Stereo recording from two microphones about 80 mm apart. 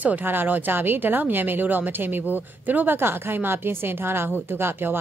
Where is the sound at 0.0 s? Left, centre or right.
Right.